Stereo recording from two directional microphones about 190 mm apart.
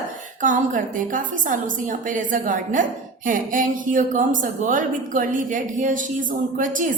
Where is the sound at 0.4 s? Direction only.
45° right (ahead or behind).